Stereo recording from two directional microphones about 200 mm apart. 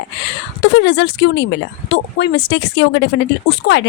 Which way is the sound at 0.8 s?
60° left (ahead or behind).